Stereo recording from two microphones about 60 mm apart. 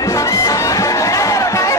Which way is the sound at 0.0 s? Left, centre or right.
Left.